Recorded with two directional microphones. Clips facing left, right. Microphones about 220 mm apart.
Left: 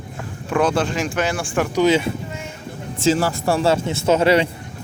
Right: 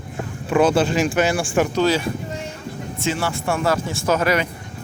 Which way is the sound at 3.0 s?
35° left (ahead or behind).